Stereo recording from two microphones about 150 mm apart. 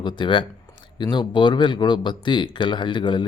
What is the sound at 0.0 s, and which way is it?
Speech, 30° left (ahead or behind).